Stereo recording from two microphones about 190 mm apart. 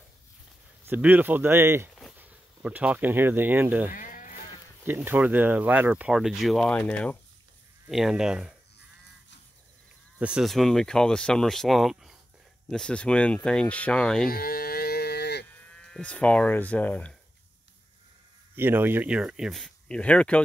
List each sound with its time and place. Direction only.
0.8 s speech: 10° right (ahead or behind)
3.9 s sheep: 45° left (ahead or behind)
4.8 s speech: 10° right (ahead or behind); by 7.2 s 10° left (ahead or behind)
7.9 s speech: centre (ahead or behind)
10.1 s speech: 5° right (ahead or behind)
14.3 s livestock: 50° left (ahead or behind)
15.7 s speech: 5° left (ahead or behind)
18.6 s speech: 10° right (ahead or behind); by 20.4 s 5° left (ahead or behind)